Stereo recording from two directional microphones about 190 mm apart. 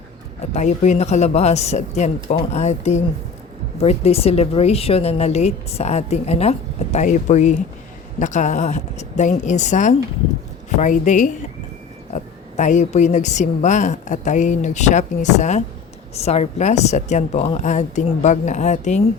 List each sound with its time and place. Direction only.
0.5 s a woman's voice: 35° left (ahead or behind)